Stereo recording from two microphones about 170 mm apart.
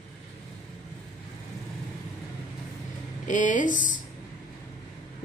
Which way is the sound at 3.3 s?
50° left (ahead or behind).